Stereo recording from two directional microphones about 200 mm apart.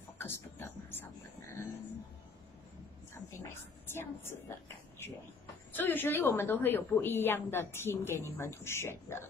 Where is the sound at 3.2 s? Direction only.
10° left (ahead or behind).